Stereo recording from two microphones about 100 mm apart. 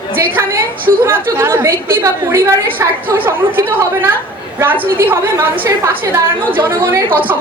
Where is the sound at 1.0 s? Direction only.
25° right (ahead or behind).